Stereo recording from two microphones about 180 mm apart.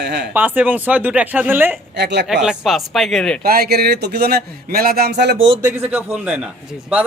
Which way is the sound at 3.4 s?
60° right (ahead or behind).